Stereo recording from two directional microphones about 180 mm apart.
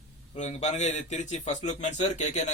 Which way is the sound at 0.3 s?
40° left (ahead or behind).